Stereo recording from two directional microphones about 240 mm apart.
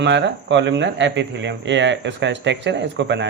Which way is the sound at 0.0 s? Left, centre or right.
Right.